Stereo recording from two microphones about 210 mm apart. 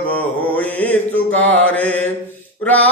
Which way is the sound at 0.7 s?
5° left (ahead or behind).